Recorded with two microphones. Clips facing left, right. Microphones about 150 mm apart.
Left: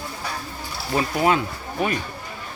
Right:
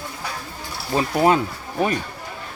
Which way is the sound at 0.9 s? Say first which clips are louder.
Right 3 dB; 30° right (ahead or behind).